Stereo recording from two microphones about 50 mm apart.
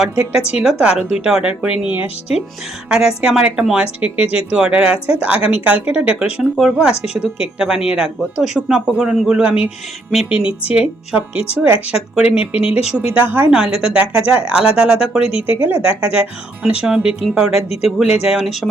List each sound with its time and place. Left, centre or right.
0.3 s speech: centre
2.9 s speech: centre
6.6 s speech: centre
13.1 s a woman's voice: right
13.5 s speech: centre
14.3 s speech: right
15.4 s speech: right
15.8 s speech: right
16.6 s speech: centre